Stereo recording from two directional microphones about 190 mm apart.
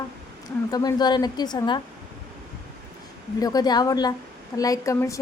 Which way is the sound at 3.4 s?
20° left (ahead or behind).